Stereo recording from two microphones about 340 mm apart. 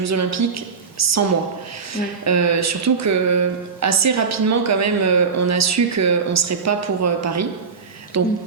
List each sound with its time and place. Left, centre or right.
0.0 s a woman's voice: right
2.2 s speech: right